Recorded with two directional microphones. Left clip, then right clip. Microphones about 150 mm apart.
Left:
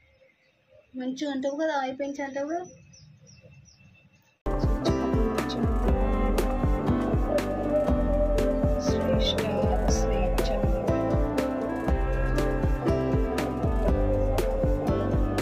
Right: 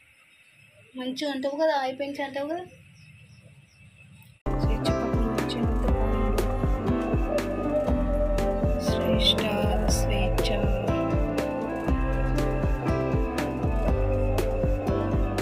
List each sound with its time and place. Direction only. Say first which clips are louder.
0.9 s a woman's voice: right 1 dB; 20° left (ahead or behind)
4.4 s music: even; centre (ahead or behind)